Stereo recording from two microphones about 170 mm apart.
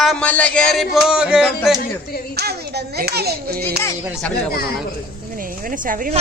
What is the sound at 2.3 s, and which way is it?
A child's voice, 70° right (ahead or behind).